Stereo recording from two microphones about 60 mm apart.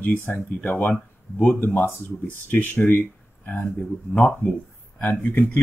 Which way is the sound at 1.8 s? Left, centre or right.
Left.